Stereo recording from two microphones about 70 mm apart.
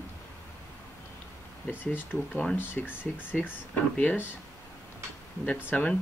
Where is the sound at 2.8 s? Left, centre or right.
Left.